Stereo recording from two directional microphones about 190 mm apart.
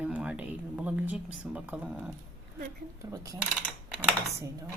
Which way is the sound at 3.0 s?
20° right (ahead or behind).